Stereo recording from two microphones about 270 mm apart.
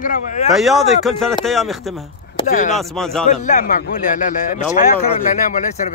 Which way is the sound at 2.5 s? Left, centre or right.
Left.